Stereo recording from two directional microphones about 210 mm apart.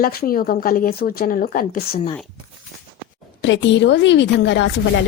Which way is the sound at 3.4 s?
60° left (ahead or behind).